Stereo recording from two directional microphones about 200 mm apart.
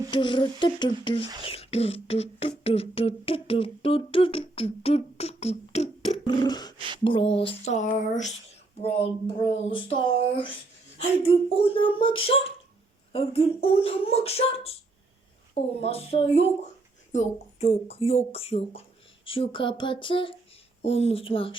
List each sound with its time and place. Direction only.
0.1 s speech: 25° left (ahead or behind)
6.2 s speech: 20° left (ahead or behind)
10.9 s speech: 25° left (ahead or behind)
15.8 s speech: 30° left (ahead or behind)